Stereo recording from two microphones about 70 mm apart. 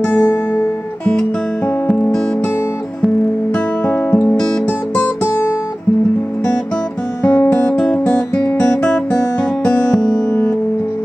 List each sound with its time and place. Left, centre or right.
0.1 s music: left
3.5 s music: left
7.2 s music: left
7.7 s music: centre
8.1 s music: left
8.8 s guitar: centre